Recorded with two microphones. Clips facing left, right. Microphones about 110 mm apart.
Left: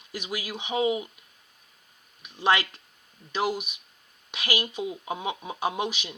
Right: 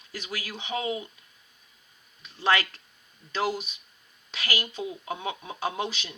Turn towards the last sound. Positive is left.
turn(degrees=15)  # may be behind; listen again after turning